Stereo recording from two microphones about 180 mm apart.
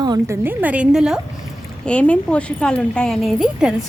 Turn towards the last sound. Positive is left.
turn(degrees=0)  # may be behind; listen again after turning